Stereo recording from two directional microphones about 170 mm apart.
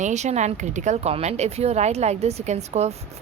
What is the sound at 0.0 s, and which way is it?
Speech, 45° right (ahead or behind).